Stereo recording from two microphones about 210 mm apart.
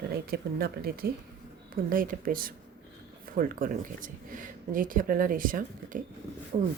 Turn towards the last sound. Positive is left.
turn(degrees=-35)  # may be behind; listen again after turning